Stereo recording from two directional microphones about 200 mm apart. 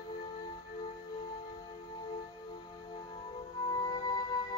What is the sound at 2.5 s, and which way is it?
Music, 20° left (ahead or behind).